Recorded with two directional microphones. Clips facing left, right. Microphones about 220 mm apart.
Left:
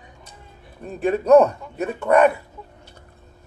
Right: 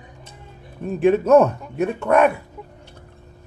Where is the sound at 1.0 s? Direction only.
Centre (ahead or behind).